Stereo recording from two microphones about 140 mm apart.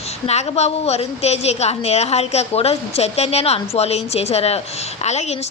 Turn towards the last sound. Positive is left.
turn(degrees=50)  # may be behind; listen again after turning